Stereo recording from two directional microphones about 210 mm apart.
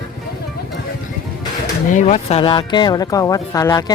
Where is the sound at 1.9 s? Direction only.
35° left (ahead or behind).